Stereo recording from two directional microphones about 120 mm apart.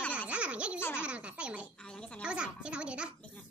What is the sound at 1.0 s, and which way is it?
Speech, 10° right (ahead or behind).